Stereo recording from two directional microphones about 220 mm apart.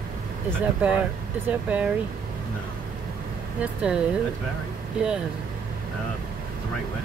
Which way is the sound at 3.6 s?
5° right (ahead or behind).